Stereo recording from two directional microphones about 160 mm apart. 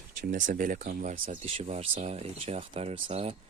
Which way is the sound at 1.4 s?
40° right (ahead or behind).